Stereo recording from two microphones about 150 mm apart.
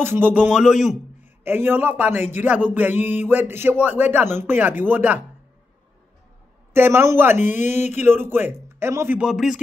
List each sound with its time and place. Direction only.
0.0 s speech: 15° right (ahead or behind)
1.2 s a man's voice: 15° right (ahead or behind)
6.7 s speech: 15° right (ahead or behind)
7.3 s a sound: 50° left (ahead or behind)
8.0 s speech: 15° right (ahead or behind)
9.3 s speech: centre (ahead or behind)